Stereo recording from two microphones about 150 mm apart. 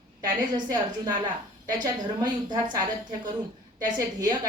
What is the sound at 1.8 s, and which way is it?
A woman's voice, 30° right (ahead or behind).